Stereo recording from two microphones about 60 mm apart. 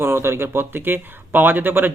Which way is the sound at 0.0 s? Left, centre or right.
Right.